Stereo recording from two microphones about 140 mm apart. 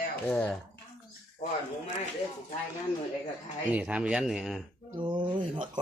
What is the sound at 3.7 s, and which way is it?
Speech, 10° right (ahead or behind).